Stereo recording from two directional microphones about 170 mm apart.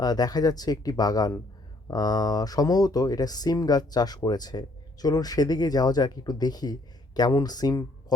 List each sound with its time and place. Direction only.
0.0 s speech: 25° left (ahead or behind)